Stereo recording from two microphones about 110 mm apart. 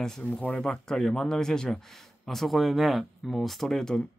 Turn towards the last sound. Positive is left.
turn(degrees=5)  # may be behind; listen again after turning